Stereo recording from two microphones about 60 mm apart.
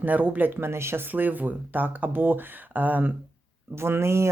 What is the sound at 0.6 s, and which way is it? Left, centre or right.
Speech, right.